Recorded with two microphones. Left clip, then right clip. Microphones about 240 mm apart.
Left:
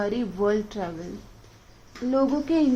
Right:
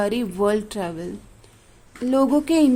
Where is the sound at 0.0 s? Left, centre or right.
Right.